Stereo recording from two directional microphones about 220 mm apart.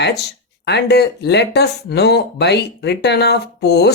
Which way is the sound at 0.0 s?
50° left (ahead or behind).